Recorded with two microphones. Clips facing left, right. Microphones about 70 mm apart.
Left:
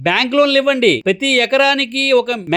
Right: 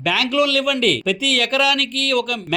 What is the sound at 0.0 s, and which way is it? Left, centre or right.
Speech, left.